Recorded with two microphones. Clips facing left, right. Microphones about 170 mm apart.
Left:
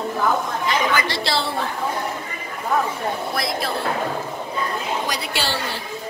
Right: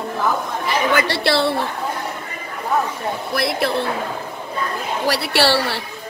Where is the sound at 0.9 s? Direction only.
65° right (ahead or behind).